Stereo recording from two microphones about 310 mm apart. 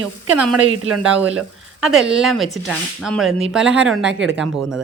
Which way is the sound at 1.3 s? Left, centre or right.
Centre.